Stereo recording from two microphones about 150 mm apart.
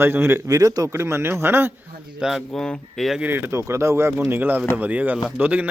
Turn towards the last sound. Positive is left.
turn(degrees=-10)  # may be behind; listen again after turning